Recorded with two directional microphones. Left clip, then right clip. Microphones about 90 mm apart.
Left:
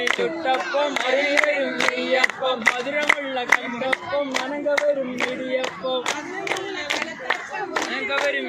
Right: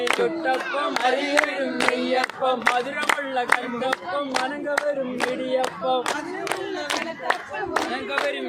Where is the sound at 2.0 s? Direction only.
65° right (ahead or behind).